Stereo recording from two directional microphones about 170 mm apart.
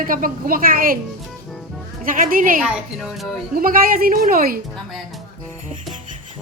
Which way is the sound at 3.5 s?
55° right (ahead or behind).